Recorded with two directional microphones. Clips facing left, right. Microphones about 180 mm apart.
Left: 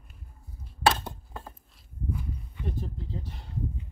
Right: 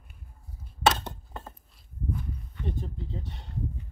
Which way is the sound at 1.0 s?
Centre (ahead or behind).